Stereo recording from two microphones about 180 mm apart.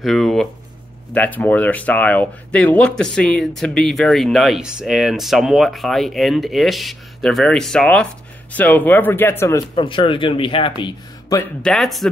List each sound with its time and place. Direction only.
0.0 s speech: centre (ahead or behind)
9.8 s speech: 30° left (ahead or behind)
11.6 s speech: centre (ahead or behind)